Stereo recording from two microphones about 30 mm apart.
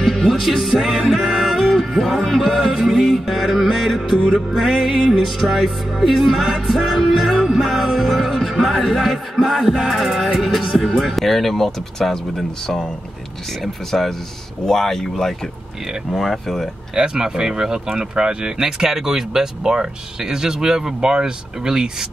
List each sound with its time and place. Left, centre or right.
0.1 s music: centre
2.3 s a sound: centre
3.1 s music: centre
8.1 s music: centre
10.8 s speech: centre
13.9 s speech: centre
16.2 s music: centre
16.9 s speech: right